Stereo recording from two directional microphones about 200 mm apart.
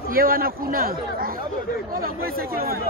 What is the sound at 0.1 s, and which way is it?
Speech, 45° right (ahead or behind).